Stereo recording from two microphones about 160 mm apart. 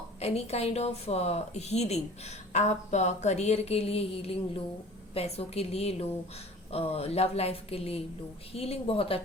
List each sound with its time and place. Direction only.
0.2 s a woman's voice: 40° left (ahead or behind)